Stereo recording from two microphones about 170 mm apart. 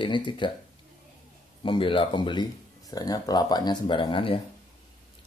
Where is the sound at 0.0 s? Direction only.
30° left (ahead or behind).